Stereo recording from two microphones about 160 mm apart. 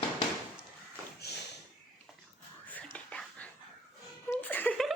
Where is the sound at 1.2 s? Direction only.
90° left.